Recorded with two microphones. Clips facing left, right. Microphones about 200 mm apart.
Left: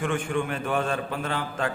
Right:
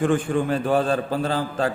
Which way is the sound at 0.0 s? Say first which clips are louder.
Right 6 dB; 35° right (ahead or behind).